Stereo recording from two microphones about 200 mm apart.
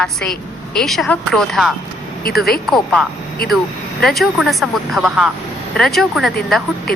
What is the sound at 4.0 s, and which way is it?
A woman's voice, centre (ahead or behind).